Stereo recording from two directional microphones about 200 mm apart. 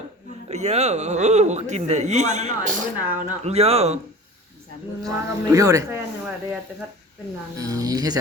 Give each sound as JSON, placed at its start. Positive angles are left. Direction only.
{"t": 0.4, "sound": "speech", "side_deg": -35}
{"t": 5.0, "sound": "speech", "side_deg": -15}
{"t": 7.6, "sound": "speech", "side_deg": -15}